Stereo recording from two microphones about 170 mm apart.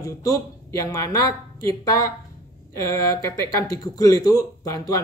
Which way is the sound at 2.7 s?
15° left (ahead or behind).